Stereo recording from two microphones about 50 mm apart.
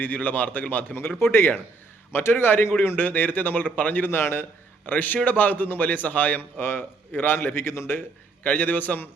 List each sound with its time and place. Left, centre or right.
0.0 s a man's voice: left
1.2 s a man's voice: left
4.2 s a man's voice: left
4.9 s a man's voice: left
6.6 s a man's voice: left
8.4 s a man's voice: left